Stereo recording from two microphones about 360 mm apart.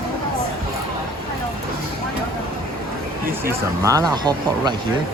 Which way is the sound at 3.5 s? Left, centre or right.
Centre.